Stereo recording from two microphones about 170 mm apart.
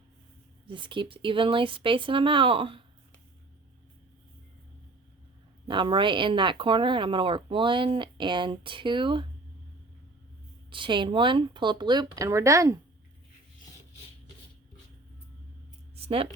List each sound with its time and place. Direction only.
0.7 s speech: 30° right (ahead or behind)
5.6 s speech: 30° right (ahead or behind)
10.7 s speech: 30° right (ahead or behind)
16.0 s a sound: 35° right (ahead or behind)